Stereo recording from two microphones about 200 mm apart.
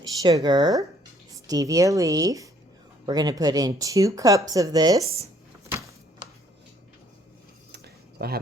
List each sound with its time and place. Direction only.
0.2 s speech: 20° right (ahead or behind)